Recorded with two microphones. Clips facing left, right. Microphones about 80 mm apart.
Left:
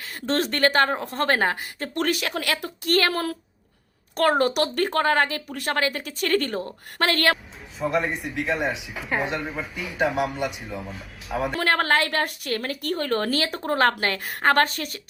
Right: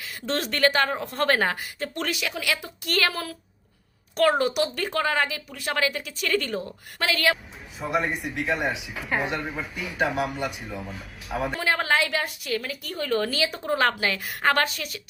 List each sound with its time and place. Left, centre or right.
0.1 s a woman's voice: left
2.0 s a woman's voice: left
7.8 s speech: centre
10.2 s speech: centre
10.9 s speech: centre
11.6 s a woman's voice: left